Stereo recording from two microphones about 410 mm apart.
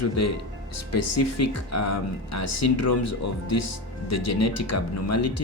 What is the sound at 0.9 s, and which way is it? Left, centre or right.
Speech, left.